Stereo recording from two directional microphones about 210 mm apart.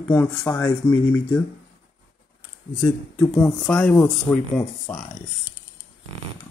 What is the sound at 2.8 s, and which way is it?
Speech, 5° left (ahead or behind).